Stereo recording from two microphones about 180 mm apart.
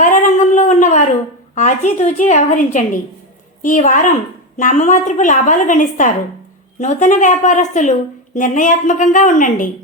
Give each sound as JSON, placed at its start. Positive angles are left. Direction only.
{"t": 0.0, "sound": "a sound", "side_deg": 45}
{"t": 1.5, "sound": "a woman's voice", "side_deg": 45}
{"t": 3.6, "sound": "a woman's voice", "side_deg": 45}